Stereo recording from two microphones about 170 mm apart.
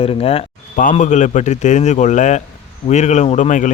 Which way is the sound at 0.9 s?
45° left (ahead or behind).